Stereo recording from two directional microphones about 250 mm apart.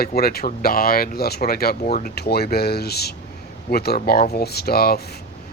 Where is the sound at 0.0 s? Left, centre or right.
Left.